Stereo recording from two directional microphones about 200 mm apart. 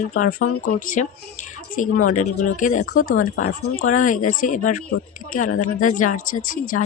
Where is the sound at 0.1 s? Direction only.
45° left (ahead or behind).